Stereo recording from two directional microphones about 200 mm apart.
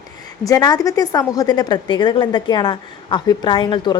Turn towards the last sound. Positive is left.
turn(degrees=25)  # may be behind; listen again after turning